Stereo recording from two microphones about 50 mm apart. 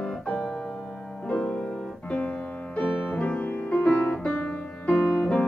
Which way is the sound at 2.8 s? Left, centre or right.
Left.